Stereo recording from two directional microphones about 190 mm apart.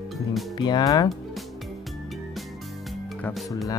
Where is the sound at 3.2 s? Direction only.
Centre (ahead or behind).